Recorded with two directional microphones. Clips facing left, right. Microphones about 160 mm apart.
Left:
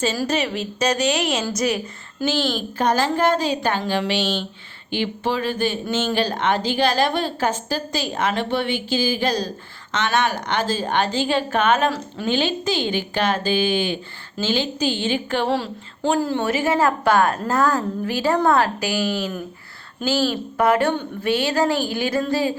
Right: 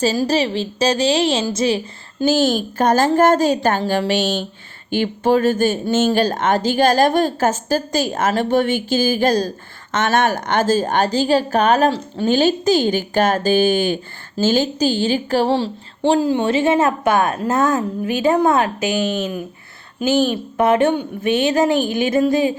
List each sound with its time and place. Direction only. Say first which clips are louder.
0.3 s a woman's voice: right 4 dB; 30° right (ahead or behind)
2.2 s a woman's voice: right 6 dB; 45° right (ahead or behind)
16.2 s a woman's voice: right 5 dB; 20° right (ahead or behind)